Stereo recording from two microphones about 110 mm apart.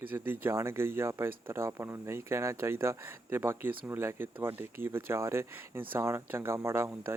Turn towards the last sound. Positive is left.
turn(degrees=-20)  # may be behind; listen again after turning